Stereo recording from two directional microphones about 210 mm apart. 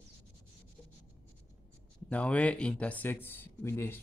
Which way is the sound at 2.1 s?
5° left (ahead or behind).